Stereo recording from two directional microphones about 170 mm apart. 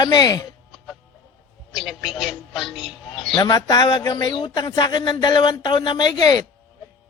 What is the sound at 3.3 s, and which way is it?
Speech, 25° left (ahead or behind).